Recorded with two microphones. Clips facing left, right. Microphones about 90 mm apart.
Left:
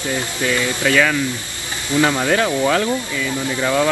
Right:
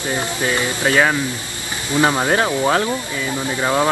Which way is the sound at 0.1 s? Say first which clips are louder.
Even; 25° right (ahead or behind).